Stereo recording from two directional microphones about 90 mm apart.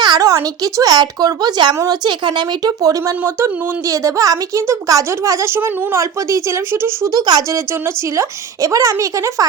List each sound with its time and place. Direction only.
0.2 s speech: 40° right (ahead or behind)
3.0 s a woman's voice: 30° right (ahead or behind)
7.1 s speech: 50° right (ahead or behind)
7.5 s a woman's voice: 30° right (ahead or behind)